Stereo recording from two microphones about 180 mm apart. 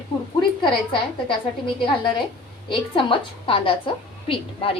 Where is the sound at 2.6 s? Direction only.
30° left (ahead or behind).